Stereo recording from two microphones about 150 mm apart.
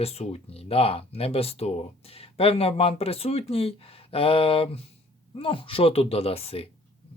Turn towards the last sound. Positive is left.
turn(degrees=40)  # may be behind; listen again after turning